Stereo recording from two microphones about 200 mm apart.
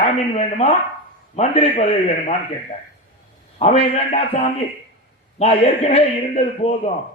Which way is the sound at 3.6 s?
30° left (ahead or behind).